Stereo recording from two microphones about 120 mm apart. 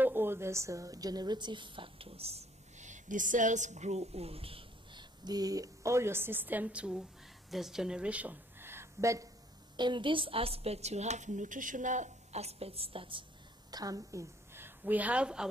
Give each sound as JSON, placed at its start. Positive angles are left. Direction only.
{"t": 0.0, "sound": "a woman's voice", "side_deg": -20}
{"t": 5.2, "sound": "a woman's voice", "side_deg": -35}
{"t": 9.8, "sound": "a woman's voice", "side_deg": -40}
{"t": 13.7, "sound": "a woman's voice", "side_deg": -30}